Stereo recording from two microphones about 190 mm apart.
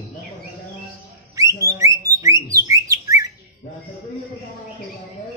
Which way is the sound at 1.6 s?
15° right (ahead or behind).